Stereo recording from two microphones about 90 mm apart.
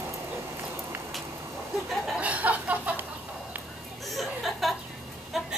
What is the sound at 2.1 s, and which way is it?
Chuckle, 15° right (ahead or behind).